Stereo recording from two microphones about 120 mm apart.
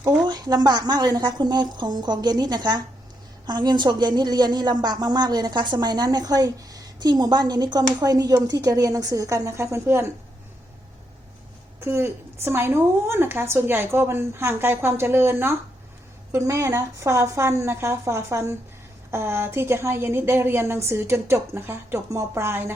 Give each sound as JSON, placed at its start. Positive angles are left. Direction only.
{"t": 0.3, "sound": "a woman's voice", "side_deg": -35}
{"t": 11.8, "sound": "a woman's voice", "side_deg": -20}